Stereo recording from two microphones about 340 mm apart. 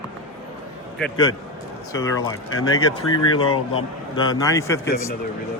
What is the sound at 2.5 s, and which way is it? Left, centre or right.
Speech, left.